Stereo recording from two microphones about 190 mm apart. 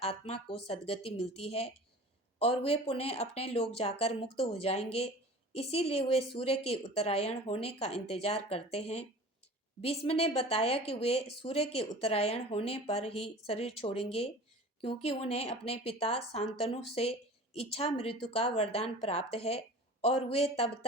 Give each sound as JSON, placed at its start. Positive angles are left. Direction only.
{"t": 0.0, "sound": "speech", "side_deg": 30}